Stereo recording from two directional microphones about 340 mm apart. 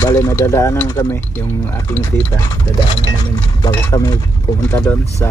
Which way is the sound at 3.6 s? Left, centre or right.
Centre.